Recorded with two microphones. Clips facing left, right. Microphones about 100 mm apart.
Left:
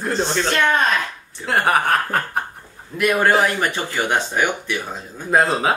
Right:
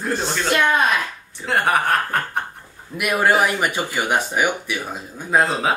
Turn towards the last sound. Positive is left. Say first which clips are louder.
# left 1 dB
turn(degrees=0)  # may be behind; listen again after turning